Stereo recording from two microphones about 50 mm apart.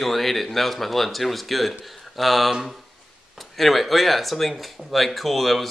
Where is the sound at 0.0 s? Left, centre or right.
Centre.